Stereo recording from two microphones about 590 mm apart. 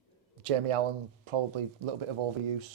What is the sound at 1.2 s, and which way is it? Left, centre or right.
Speech, right.